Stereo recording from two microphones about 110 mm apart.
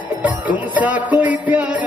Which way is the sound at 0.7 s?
15° right (ahead or behind).